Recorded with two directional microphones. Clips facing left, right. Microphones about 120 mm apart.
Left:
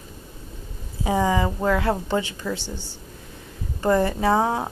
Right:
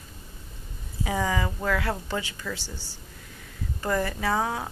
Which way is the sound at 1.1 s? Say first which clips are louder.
Left 6 dB; 25° left (ahead or behind).